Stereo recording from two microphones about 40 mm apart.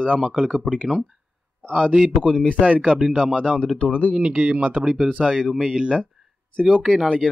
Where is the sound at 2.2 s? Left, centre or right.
Centre.